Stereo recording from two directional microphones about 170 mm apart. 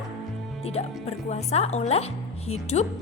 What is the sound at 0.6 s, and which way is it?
Speech, 35° left (ahead or behind).